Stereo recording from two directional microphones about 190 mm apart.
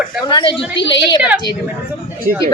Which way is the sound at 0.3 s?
25° left (ahead or behind).